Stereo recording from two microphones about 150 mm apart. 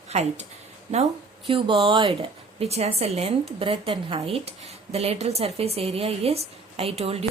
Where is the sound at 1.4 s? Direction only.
35° right (ahead or behind).